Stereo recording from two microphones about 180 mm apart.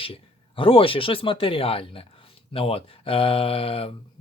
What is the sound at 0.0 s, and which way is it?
Speech, 30° left (ahead or behind).